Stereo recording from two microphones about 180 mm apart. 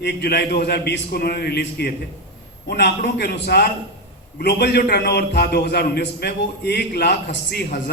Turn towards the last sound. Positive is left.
turn(degrees=65)  # may be behind; listen again after turning